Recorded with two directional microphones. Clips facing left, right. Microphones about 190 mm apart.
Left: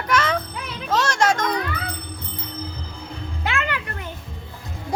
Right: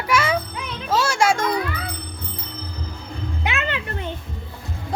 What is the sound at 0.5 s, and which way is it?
Music, centre (ahead or behind).